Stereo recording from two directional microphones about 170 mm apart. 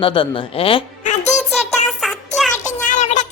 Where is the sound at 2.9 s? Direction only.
45° left (ahead or behind).